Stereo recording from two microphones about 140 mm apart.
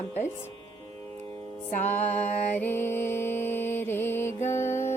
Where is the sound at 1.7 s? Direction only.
65° left (ahead or behind).